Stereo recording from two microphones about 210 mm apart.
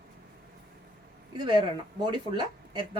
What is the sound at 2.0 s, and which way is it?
Speech, 20° right (ahead or behind).